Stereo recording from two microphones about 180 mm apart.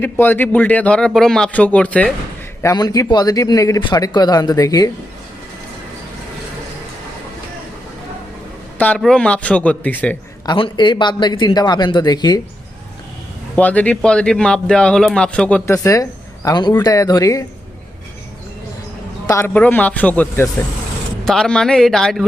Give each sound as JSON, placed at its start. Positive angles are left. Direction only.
{"t": 0.0, "sound": "a man's voice", "side_deg": 10}
{"t": 2.6, "sound": "speech", "side_deg": 20}
{"t": 8.8, "sound": "a man's voice", "side_deg": 5}
{"t": 10.4, "sound": "speech", "side_deg": 25}
{"t": 13.6, "sound": "a man's voice", "side_deg": 10}
{"t": 19.5, "sound": "a man's voice", "side_deg": 10}